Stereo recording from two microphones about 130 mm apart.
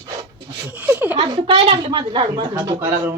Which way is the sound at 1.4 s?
45° right (ahead or behind).